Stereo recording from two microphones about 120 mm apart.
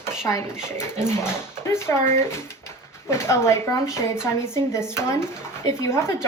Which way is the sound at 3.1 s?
25° left (ahead or behind).